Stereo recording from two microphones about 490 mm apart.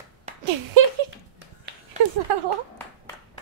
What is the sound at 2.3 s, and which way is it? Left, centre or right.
Speech, right.